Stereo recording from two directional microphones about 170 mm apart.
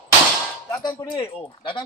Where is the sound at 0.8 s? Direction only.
25° left (ahead or behind).